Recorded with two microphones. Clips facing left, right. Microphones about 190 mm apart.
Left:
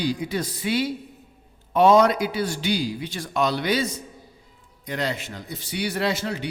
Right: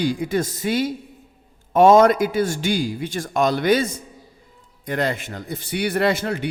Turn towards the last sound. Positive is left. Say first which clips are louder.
# right 5 dB
turn(degrees=-55)  # may be behind; listen again after turning